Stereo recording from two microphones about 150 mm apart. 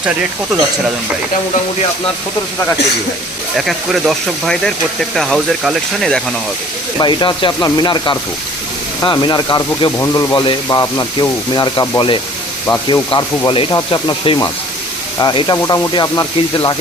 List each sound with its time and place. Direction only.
3.6 s speech: centre (ahead or behind)
7.0 s speech: 30° left (ahead or behind)